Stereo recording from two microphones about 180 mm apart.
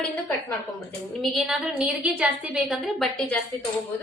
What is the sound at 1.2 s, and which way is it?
A woman's voice, centre (ahead or behind).